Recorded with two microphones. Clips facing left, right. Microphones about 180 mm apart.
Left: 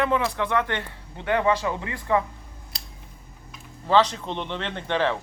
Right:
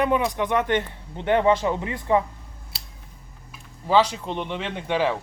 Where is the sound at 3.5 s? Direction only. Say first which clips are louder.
Even; 10° right (ahead or behind).